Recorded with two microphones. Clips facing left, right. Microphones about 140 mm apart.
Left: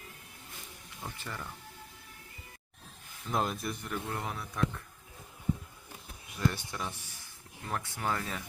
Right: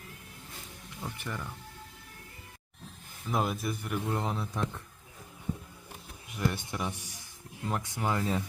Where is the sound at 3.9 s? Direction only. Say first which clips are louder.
Right 7 dB; 20° right (ahead or behind).